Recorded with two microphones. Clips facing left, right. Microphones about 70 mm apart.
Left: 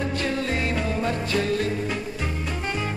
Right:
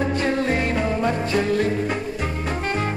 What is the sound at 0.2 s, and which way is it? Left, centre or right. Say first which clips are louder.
Music: right 4 dB; right.